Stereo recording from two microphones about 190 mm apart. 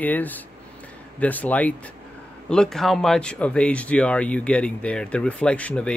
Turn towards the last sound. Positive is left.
turn(degrees=5)  # may be behind; listen again after turning